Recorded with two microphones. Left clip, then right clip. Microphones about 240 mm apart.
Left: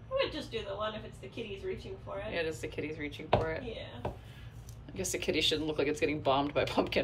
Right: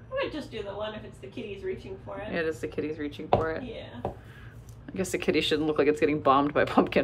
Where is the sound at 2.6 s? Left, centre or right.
Centre.